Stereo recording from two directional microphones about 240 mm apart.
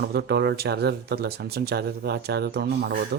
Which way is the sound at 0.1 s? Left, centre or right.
Right.